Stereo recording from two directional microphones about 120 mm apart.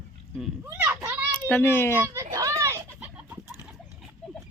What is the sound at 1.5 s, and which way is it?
Speech, 20° left (ahead or behind).